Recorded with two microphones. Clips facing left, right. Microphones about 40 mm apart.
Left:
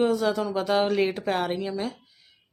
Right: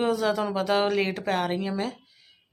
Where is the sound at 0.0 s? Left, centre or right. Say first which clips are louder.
Left 1 dB; centre.